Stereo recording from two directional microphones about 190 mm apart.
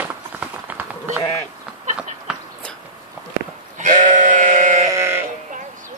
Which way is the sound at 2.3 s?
5° right (ahead or behind).